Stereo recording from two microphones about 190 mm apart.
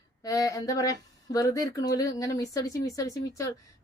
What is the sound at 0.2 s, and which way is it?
Speech, 15° left (ahead or behind).